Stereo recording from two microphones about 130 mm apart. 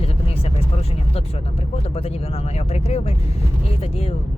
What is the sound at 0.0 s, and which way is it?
Vehicle, 50° left (ahead or behind).